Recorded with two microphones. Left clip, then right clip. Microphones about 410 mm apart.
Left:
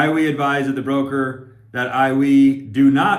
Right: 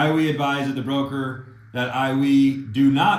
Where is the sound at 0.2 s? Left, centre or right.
Centre.